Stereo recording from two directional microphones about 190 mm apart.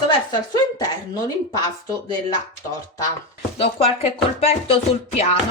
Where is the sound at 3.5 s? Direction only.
30° left (ahead or behind).